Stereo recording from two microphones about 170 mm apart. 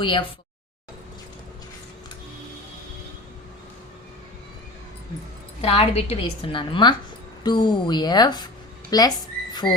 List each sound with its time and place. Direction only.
0.0 s a woman's voice: 30° left (ahead or behind)
5.6 s a woman's voice: 35° left (ahead or behind)